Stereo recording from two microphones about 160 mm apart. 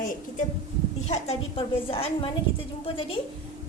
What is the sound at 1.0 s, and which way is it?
A woman's voice, 40° left (ahead or behind).